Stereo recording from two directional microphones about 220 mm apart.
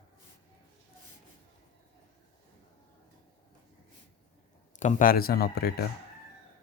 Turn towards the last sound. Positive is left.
turn(degrees=45)  # may be behind; listen again after turning